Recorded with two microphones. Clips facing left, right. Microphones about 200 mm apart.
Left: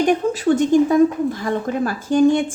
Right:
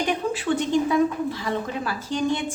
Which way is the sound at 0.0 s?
45° left (ahead or behind).